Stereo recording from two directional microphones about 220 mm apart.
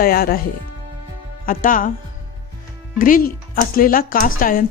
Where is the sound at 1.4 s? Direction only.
35° left (ahead or behind).